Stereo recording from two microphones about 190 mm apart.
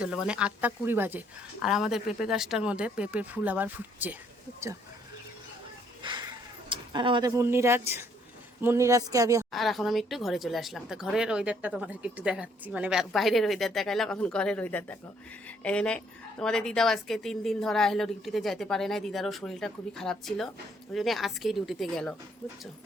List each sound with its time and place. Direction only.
0.0 s speech: 5° right (ahead or behind)
6.0 s a sound: 25° right (ahead or behind)
8.6 s speech: 15° right (ahead or behind)
9.5 s speech: centre (ahead or behind)
15.4 s a sound: 5° left (ahead or behind)
16.4 s speech: 5° left (ahead or behind)